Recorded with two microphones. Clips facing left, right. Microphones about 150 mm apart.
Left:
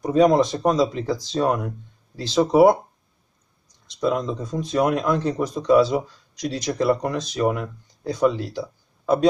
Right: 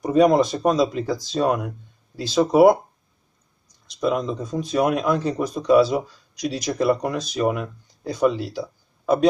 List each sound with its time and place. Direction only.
0.0 s speech: 5° right (ahead or behind)
4.0 s speech: 5° right (ahead or behind)